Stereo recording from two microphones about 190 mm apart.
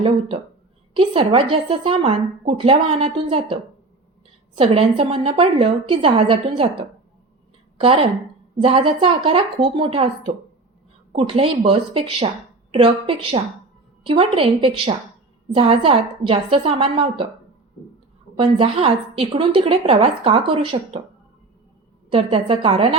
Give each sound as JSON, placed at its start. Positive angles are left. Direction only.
{"t": 0.9, "sound": "speech", "side_deg": -30}
{"t": 8.6, "sound": "speech", "side_deg": -30}
{"t": 18.3, "sound": "speech", "side_deg": -30}
{"t": 22.1, "sound": "speech", "side_deg": -30}